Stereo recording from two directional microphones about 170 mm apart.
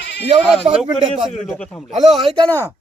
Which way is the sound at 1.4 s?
5° left (ahead or behind).